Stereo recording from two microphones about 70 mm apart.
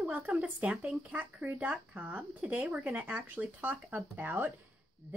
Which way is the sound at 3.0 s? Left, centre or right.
Right.